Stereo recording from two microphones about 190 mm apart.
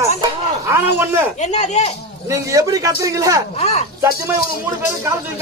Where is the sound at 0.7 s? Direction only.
10° right (ahead or behind).